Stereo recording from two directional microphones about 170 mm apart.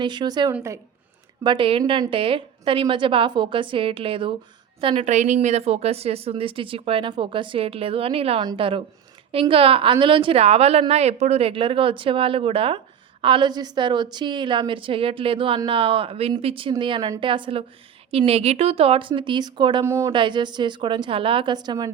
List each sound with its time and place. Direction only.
0.0 s a woman's voice: 25° right (ahead or behind)
1.5 s a woman's voice: 30° right (ahead or behind)
20.1 s a woman's voice: 25° right (ahead or behind)